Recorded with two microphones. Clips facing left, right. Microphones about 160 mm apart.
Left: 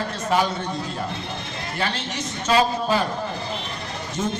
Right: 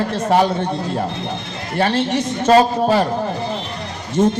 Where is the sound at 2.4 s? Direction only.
55° right (ahead or behind).